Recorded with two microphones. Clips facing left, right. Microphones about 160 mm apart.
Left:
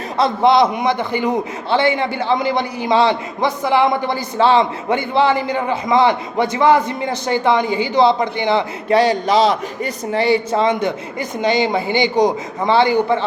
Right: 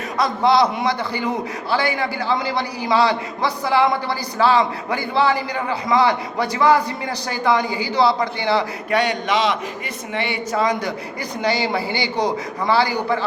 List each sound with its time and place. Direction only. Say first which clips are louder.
0.2 s a man's voice: left 3 dB; 20° left (ahead or behind)
8.9 s a man's voice: left 6 dB; 30° left (ahead or behind)